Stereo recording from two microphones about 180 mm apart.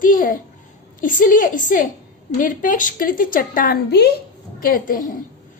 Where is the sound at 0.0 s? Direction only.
50° left (ahead or behind).